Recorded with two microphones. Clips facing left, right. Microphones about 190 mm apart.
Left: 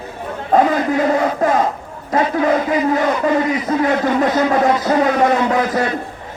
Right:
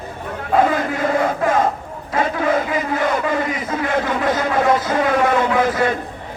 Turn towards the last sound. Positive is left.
turn(degrees=40)  # may be behind; listen again after turning